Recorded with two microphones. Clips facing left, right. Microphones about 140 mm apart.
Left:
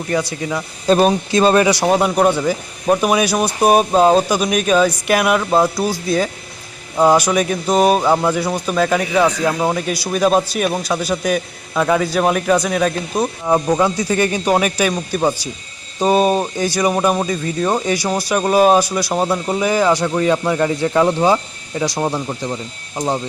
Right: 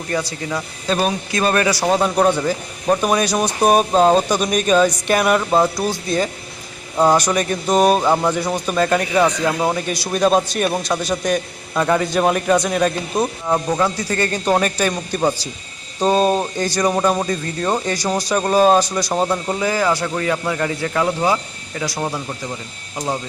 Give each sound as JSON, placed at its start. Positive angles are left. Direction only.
{"t": 0.9, "sound": "speech", "side_deg": 40}
{"t": 1.3, "sound": "speech", "side_deg": 25}
{"t": 6.9, "sound": "speech", "side_deg": 5}
{"t": 13.4, "sound": "speech", "side_deg": 15}